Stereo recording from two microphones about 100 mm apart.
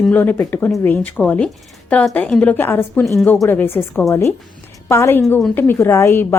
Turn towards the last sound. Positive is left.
turn(degrees=25)  # may be behind; listen again after turning